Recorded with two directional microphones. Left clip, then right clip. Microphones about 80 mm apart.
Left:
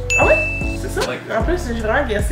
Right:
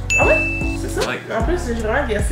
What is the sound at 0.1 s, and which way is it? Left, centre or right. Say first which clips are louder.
Music: left 1 dB; centre.